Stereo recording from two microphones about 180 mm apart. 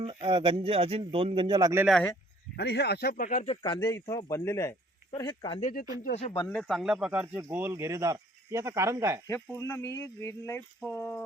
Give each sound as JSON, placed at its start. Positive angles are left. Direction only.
{"t": 0.0, "sound": "speech", "side_deg": -25}
{"t": 1.8, "sound": "speech", "side_deg": 0}
{"t": 2.6, "sound": "speech", "side_deg": 65}
{"t": 3.8, "sound": "speech", "side_deg": 15}
{"t": 4.0, "sound": "speech", "side_deg": 25}
{"t": 6.1, "sound": "speech", "side_deg": 35}
{"t": 6.5, "sound": "speech", "side_deg": 0}
{"t": 9.2, "sound": "speech", "side_deg": 15}